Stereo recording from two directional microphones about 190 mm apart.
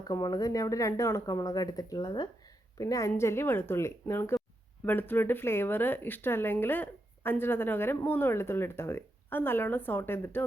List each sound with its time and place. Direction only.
0.0 s speech: 20° left (ahead or behind)